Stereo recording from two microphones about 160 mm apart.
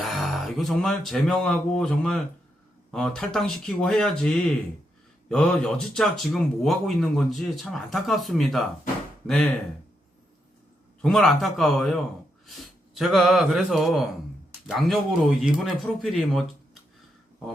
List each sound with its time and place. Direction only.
0.0 s speech: centre (ahead or behind)
11.0 s speech: centre (ahead or behind)